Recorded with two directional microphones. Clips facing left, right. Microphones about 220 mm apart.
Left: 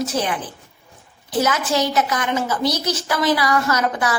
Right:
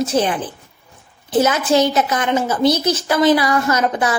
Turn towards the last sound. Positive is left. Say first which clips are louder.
# right 3 dB
turn(degrees=-20)  # may be behind; listen again after turning